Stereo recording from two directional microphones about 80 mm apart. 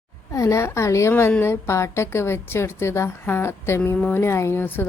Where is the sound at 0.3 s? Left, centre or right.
Left.